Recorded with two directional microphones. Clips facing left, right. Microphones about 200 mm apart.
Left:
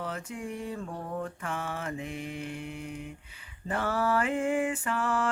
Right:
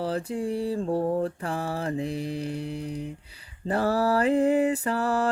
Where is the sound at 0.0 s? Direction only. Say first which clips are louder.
Right 8 dB; 35° right (ahead or behind).